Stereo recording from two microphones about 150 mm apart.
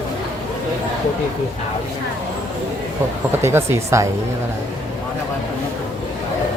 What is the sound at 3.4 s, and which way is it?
Speech, 15° right (ahead or behind).